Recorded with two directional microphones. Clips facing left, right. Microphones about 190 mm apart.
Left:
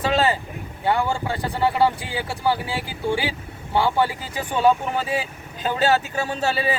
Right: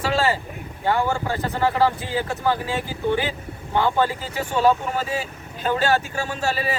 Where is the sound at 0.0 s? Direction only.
20° left (ahead or behind).